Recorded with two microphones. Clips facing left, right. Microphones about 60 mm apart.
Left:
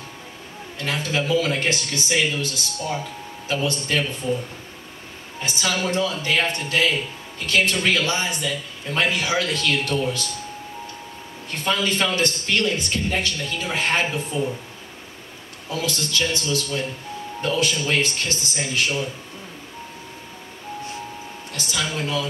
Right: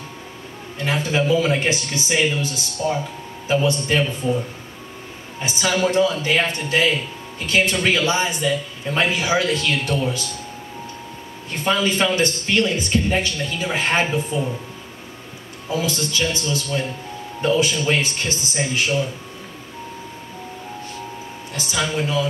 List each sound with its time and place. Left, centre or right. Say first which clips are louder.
0.7 s a man's voice: right 4 dB; centre
5.4 s a man's voice: right 4 dB; right
11.5 s speech: right 3 dB; centre
15.7 s speech: right 3 dB; centre
21.5 s speech: right 4 dB; centre